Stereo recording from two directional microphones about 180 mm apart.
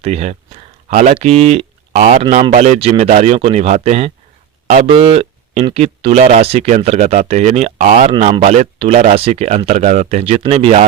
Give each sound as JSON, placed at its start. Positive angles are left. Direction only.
{"t": 0.0, "sound": "speech", "side_deg": -35}